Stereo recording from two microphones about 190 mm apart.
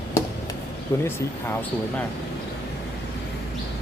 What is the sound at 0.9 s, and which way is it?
Speech, 15° left (ahead or behind).